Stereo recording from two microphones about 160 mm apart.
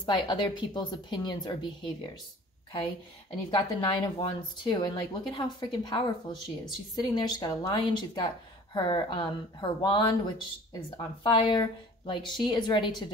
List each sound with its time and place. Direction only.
0.0 s speech: 30° left (ahead or behind)
3.4 s speech: 30° left (ahead or behind)